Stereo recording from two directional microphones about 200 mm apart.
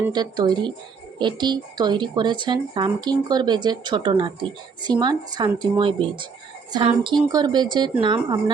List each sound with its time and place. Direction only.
0.1 s speech: 20° right (ahead or behind)